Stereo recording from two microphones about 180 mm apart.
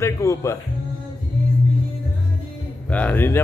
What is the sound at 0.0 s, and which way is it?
Speech, 15° left (ahead or behind).